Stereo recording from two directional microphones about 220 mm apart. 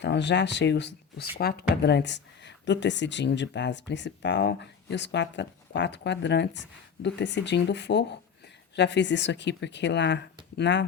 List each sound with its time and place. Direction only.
0.0 s speech: 50° left (ahead or behind)